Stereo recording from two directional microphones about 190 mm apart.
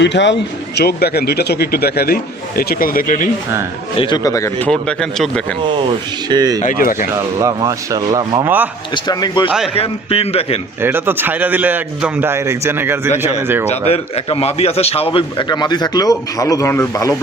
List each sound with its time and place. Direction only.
0.0 s speech: 70° left (ahead or behind)
0.8 s a man's voice: 55° left (ahead or behind)
3.9 s speech: 25° left (ahead or behind)
4.7 s speech: 5° left (ahead or behind)
6.2 s speech: 20° right (ahead or behind)
6.6 s speech: 45° left (ahead or behind)
7.3 s a man's voice: 15° right (ahead or behind)
8.4 s a man's voice: 10° right (ahead or behind)
9.0 s a man's voice: 25° left (ahead or behind)
10.8 s a man's voice: 10° right (ahead or behind)
13.7 s a man's voice: 30° left (ahead or behind); by 17.2 s 15° left (ahead or behind)